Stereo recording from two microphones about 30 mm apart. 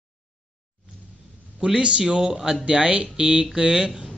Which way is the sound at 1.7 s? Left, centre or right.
Right.